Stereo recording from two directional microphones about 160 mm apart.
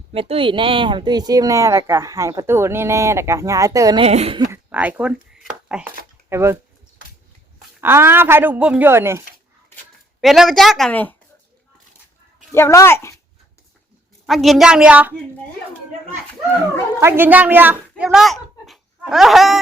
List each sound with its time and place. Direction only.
0.1 s speech: 35° right (ahead or behind)
4.0 s a woman's voice: 40° right (ahead or behind)
4.5 s a sound: 10° right (ahead or behind)
6.2 s speech: 15° right (ahead or behind)
7.8 s speech: 15° right (ahead or behind)
10.2 s a woman's voice: centre (ahead or behind)
12.5 s speech: 15° left (ahead or behind)
14.3 s a woman's voice: centre (ahead or behind)
17.0 s speech: 15° right (ahead or behind)